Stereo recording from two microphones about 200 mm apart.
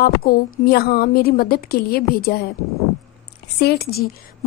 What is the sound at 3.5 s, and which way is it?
Speech, 50° left (ahead or behind).